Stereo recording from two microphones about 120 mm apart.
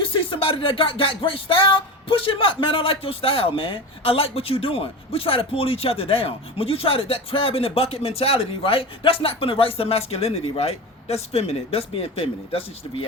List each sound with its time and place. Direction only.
0.1 s music: 45° left (ahead or behind)